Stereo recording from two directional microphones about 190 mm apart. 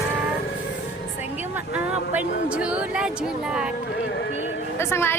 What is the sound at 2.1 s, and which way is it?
Speech, 5° right (ahead or behind).